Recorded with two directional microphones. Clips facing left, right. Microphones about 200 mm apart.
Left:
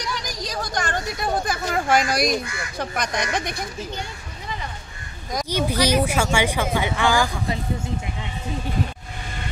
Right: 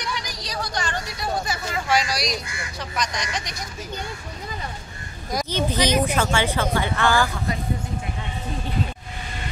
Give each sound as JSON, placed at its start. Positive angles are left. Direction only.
{"t": 0.2, "sound": "a sound", "side_deg": 45}
{"t": 2.8, "sound": "speech", "side_deg": 55}
{"t": 5.5, "sound": "speech", "side_deg": 10}